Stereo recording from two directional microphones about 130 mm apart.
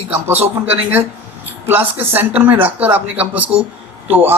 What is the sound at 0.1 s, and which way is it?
Speech, 15° right (ahead or behind).